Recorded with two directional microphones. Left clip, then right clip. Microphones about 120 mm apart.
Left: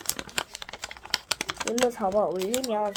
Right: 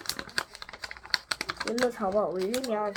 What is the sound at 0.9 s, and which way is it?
Typing, 45° left (ahead or behind).